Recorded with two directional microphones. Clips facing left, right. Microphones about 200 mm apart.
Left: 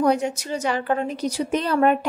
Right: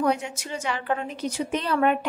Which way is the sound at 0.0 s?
40° left (ahead or behind).